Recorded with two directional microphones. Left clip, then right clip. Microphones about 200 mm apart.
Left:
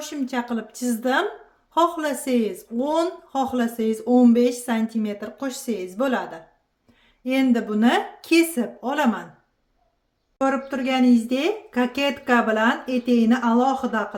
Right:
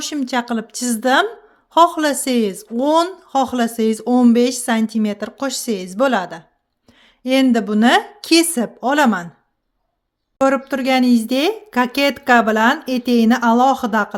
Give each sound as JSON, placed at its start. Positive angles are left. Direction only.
{"t": 0.0, "sound": "a woman's voice", "side_deg": -50}
{"t": 10.4, "sound": "speech", "side_deg": -55}